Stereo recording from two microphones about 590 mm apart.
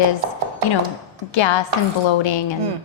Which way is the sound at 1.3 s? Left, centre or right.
Left.